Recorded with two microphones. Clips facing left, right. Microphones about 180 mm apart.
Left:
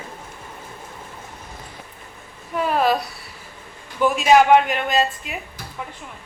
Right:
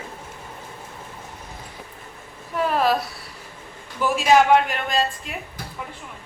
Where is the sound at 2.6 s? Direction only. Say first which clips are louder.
Left 1 dB; centre (ahead or behind).